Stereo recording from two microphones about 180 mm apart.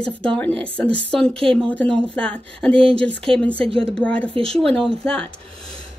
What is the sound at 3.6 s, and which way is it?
Speech, 30° right (ahead or behind).